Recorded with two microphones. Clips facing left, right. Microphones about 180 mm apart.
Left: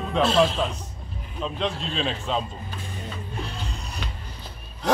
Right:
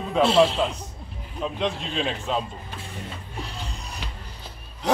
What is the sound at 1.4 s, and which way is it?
A man's voice, 15° right (ahead or behind).